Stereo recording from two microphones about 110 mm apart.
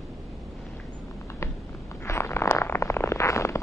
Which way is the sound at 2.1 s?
25° left (ahead or behind).